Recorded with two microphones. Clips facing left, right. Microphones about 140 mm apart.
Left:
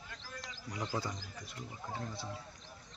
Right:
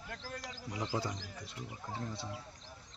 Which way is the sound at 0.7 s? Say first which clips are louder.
Right 1 dB; 25° right (ahead or behind).